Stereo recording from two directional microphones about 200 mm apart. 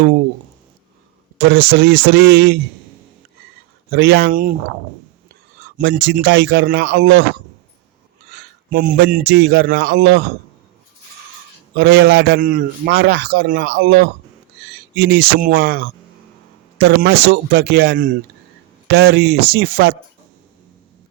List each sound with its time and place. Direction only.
1.5 s a man's voice: 55° right (ahead or behind)
3.9 s speech: 55° right (ahead or behind)
5.5 s a man's voice: 55° right (ahead or behind)
8.3 s a man's voice: 50° right (ahead or behind)
11.7 s a man's voice: 55° right (ahead or behind)